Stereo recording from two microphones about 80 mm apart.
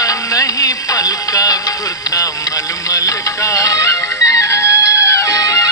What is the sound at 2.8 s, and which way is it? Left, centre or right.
Music, left.